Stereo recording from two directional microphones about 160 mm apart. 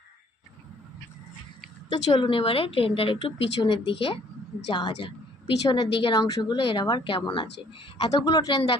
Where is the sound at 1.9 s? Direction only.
30° left (ahead or behind).